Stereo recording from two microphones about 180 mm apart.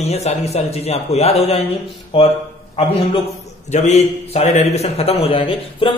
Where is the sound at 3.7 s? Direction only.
40° left (ahead or behind).